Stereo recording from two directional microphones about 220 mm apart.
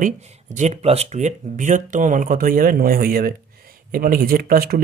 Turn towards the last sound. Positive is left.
turn(degrees=-40)  # may be behind; listen again after turning